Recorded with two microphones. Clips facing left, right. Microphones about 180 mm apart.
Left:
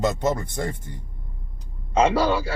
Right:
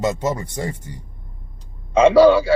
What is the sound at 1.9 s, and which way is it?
Speech, 75° right (ahead or behind).